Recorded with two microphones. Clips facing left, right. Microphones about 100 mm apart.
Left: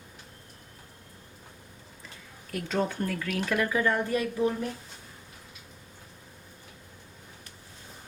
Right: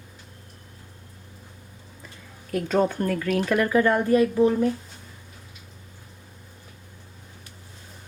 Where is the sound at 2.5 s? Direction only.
45° right (ahead or behind).